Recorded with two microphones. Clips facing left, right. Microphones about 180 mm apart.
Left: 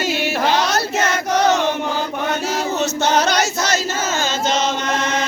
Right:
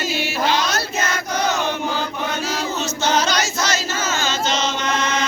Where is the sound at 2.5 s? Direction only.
60° left (ahead or behind).